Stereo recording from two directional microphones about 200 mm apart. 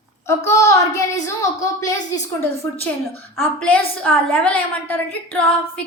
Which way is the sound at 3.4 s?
5° left (ahead or behind).